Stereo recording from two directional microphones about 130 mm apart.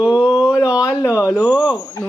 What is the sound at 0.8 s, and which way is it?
Speech, 25° left (ahead or behind).